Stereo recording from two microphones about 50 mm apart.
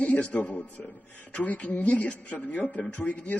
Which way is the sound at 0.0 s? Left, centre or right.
Left.